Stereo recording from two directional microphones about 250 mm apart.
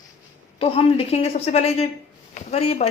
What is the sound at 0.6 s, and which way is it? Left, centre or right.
Speech, left.